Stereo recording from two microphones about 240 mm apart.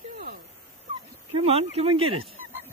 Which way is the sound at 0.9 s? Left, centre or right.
Right.